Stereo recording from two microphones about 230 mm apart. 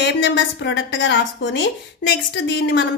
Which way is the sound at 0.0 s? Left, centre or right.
Left.